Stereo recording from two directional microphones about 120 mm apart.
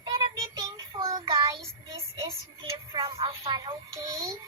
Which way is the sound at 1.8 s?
25° right (ahead or behind).